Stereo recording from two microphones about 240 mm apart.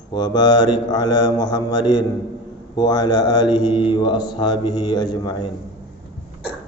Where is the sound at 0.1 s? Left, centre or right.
Centre.